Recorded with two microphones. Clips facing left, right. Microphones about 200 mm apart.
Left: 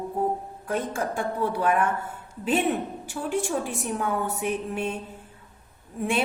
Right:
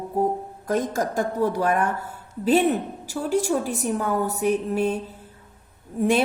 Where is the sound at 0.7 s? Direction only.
40° right (ahead or behind).